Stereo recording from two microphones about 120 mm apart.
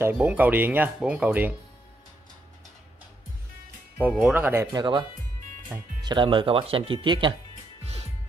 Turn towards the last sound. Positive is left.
turn(degrees=-45)  # may be behind; listen again after turning